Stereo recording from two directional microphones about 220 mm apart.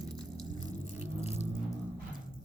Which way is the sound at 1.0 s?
30° left (ahead or behind).